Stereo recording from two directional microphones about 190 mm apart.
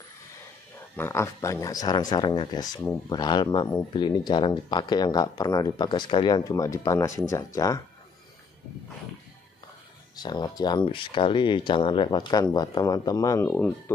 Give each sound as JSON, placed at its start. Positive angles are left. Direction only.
{"t": 0.9, "sound": "speech", "side_deg": 15}
{"t": 10.1, "sound": "speech", "side_deg": 20}